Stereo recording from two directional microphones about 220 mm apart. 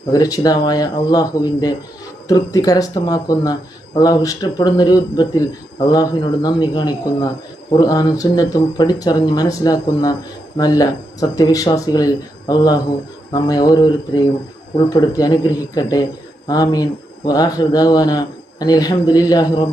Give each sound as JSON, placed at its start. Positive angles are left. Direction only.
{"t": 0.1, "sound": "speech", "side_deg": 15}